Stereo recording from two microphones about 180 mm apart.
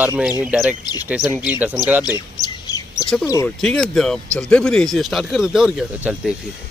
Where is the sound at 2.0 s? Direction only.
20° left (ahead or behind).